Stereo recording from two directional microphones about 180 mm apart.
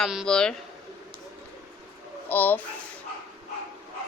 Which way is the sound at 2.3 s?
10° left (ahead or behind).